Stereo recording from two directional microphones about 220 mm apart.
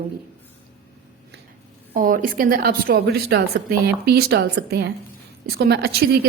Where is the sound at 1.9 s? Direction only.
40° right (ahead or behind).